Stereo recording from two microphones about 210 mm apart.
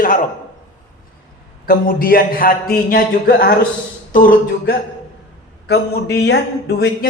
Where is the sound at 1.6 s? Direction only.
45° left (ahead or behind).